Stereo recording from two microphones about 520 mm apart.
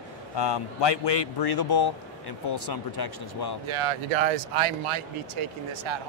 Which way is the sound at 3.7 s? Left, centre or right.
Right.